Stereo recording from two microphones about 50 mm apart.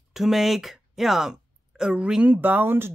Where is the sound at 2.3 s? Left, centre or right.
Right.